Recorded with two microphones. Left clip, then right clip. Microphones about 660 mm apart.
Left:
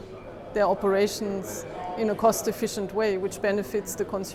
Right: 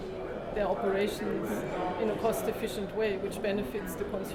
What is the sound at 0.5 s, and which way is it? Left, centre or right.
Speech, left.